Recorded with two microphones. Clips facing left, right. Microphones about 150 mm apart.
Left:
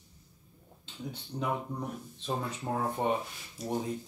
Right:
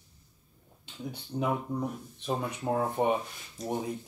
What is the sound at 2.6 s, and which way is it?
Speech, 10° right (ahead or behind).